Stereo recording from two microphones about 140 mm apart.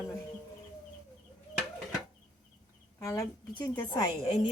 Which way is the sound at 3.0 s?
25° left (ahead or behind).